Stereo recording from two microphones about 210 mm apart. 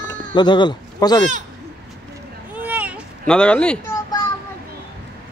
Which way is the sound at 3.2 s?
5° left (ahead or behind).